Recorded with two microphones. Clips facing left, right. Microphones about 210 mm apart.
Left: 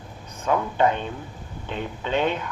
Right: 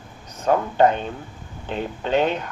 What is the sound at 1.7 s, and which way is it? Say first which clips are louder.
Speech: right 4 dB; 40° right (ahead or behind).